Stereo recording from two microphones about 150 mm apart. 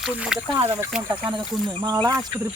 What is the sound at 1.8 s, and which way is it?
Speech, 30° right (ahead or behind).